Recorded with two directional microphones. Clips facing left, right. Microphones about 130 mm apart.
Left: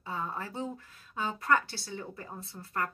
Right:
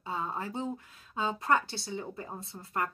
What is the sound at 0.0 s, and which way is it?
Speech, 20° right (ahead or behind).